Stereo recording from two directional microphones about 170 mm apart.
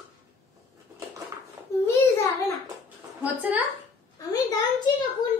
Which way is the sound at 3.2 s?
10° right (ahead or behind).